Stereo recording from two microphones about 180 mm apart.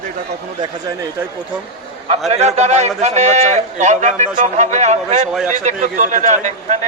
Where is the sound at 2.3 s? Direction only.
40° right (ahead or behind).